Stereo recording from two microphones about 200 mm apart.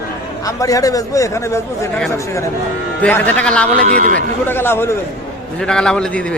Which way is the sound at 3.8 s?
40° right (ahead or behind).